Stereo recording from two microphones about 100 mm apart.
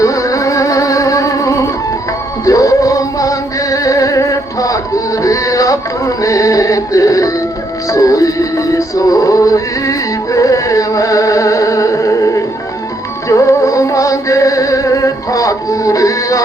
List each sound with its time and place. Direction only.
0.0 s music: 35° left (ahead or behind)